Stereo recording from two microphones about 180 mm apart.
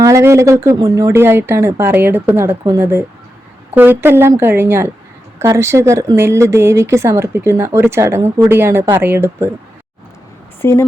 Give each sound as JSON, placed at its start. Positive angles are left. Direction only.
{"t": 0.0, "sound": "speech", "side_deg": -15}
{"t": 10.6, "sound": "a woman's voice", "side_deg": 15}